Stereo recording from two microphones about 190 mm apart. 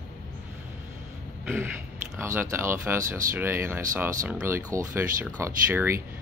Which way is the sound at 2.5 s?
15° right (ahead or behind).